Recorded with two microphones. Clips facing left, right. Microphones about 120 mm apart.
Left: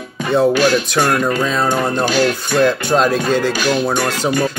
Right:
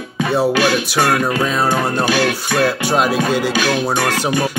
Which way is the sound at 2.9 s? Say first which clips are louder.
Left 1 dB; 10° right (ahead or behind).